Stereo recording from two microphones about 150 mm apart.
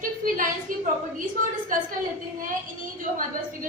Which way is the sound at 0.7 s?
60° right (ahead or behind).